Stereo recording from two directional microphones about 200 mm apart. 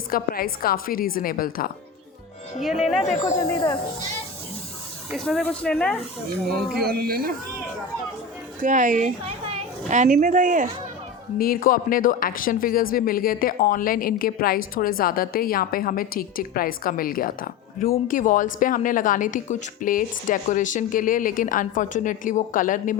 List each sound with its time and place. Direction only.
0.1 s speech: 45° left (ahead or behind)
3.4 s speech: 20° left (ahead or behind)
5.1 s speech: centre (ahead or behind)
6.5 s speech: 50° right (ahead or behind)
8.6 s a child's voice: 40° right (ahead or behind)
11.3 s speech: 45° left (ahead or behind)